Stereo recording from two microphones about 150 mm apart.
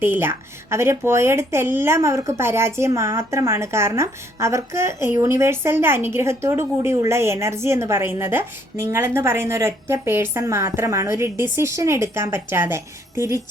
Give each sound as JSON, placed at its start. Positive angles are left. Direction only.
{"t": 0.0, "sound": "speech", "side_deg": -15}